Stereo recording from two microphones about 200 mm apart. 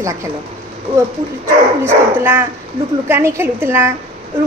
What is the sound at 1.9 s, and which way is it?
A woman's voice, 10° right (ahead or behind).